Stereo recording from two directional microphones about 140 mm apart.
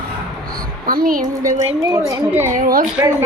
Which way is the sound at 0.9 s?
90° right.